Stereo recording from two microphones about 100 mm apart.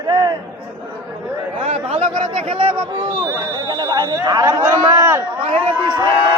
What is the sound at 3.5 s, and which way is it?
Speech, 45° right (ahead or behind).